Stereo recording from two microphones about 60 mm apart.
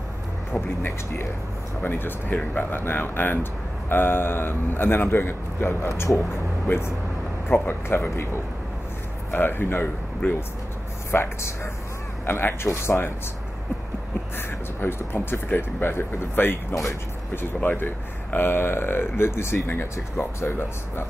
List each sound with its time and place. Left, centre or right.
0.5 s speech: left
5.9 s speech: left
6.7 s speech: left
9.3 s speech: left
14.3 s speech: left
17.6 s speech: left